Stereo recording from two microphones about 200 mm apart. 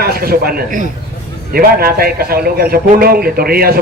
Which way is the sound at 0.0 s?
50° right (ahead or behind).